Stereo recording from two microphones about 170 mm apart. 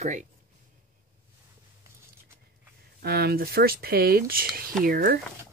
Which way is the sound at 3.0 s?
65° right (ahead or behind).